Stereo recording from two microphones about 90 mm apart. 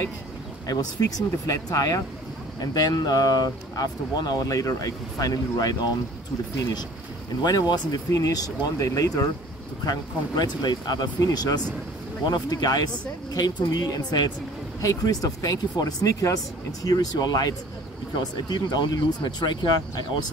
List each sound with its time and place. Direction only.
0.7 s speech: 45° left (ahead or behind)
7.4 s speech: 50° left (ahead or behind)